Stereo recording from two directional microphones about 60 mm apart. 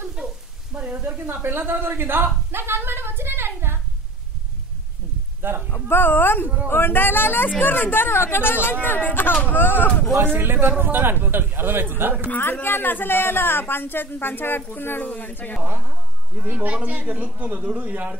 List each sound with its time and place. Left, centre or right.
0.7 s speech: right
1.2 s speech: right
5.7 s a woman's voice: left
10.1 s a man's voice: right
12.3 s a woman's voice: left
16.3 s a man's voice: right